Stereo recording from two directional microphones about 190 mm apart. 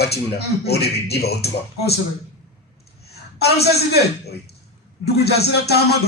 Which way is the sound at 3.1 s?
60° left (ahead or behind).